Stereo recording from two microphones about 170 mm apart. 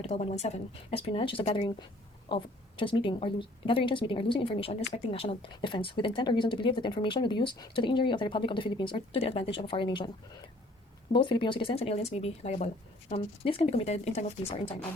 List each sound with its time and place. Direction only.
0.0 s a woman's voice: 40° left (ahead or behind)
11.1 s speech: 30° left (ahead or behind)